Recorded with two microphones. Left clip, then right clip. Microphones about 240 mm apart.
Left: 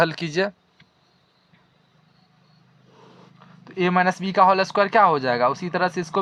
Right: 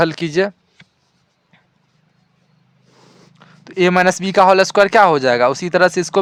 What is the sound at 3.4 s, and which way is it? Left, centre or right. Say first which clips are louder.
Speech: right 9 dB; right.